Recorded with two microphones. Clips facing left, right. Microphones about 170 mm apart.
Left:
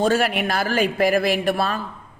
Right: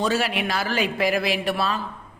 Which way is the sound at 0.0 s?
50° left (ahead or behind).